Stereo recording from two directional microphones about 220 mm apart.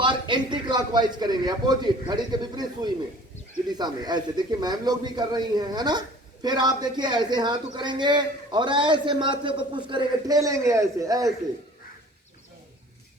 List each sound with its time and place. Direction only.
0.0 s a man's voice: 20° right (ahead or behind)